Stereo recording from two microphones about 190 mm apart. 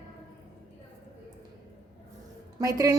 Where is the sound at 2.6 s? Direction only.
15° right (ahead or behind).